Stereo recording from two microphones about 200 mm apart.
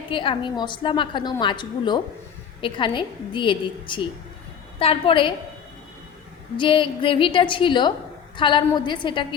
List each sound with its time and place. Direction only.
0.1 s a woman's voice: 25° left (ahead or behind)
6.6 s a woman's voice: 25° left (ahead or behind)